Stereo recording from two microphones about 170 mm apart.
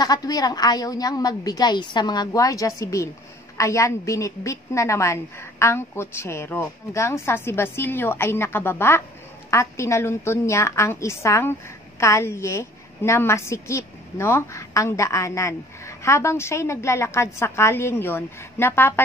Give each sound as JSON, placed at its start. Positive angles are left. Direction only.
{"t": 0.0, "sound": "a woman's voice", "side_deg": 25}